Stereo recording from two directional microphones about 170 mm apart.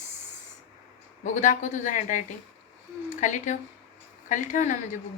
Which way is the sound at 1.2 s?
50° left (ahead or behind).